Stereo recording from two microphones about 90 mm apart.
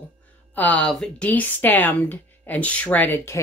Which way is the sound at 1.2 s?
20° left (ahead or behind).